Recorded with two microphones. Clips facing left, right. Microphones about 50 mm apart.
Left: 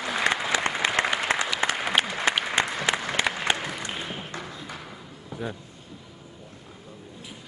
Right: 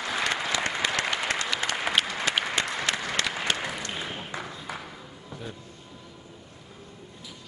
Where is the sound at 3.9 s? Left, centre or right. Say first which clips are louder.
Even; centre.